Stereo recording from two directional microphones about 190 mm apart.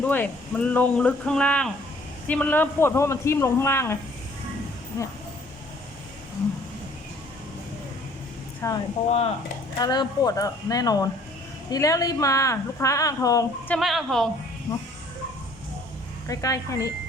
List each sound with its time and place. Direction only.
0.0 s speech: 10° left (ahead or behind)
8.6 s speech: 15° left (ahead or behind)
9.0 s speech: 35° left (ahead or behind)
9.7 s speech: 20° left (ahead or behind)
13.7 s speech: centre (ahead or behind)
16.2 s speech: 15° left (ahead or behind)